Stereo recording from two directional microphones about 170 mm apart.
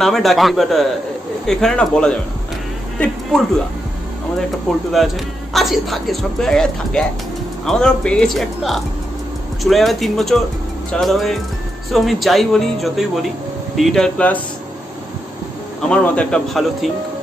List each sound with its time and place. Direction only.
0.0 s a man's voice: centre (ahead or behind)
4.9 s a man's voice: centre (ahead or behind)
15.8 s a man's voice: 5° left (ahead or behind)